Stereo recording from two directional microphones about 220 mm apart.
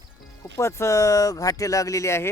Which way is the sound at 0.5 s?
10° left (ahead or behind).